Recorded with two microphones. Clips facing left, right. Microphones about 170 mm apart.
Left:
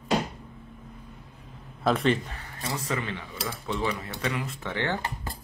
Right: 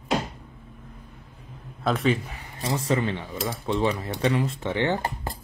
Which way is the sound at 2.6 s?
30° right (ahead or behind).